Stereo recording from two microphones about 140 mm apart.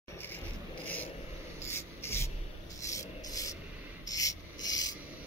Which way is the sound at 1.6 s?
15° left (ahead or behind).